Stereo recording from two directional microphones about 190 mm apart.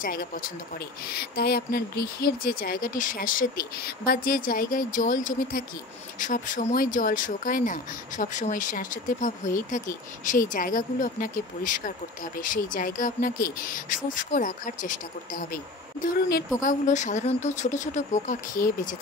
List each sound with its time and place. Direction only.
0.0 s speech: 50° left (ahead or behind)
16.6 s speech: 40° left (ahead or behind)